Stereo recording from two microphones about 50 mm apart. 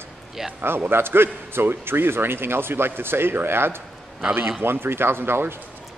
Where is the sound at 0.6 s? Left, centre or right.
Right.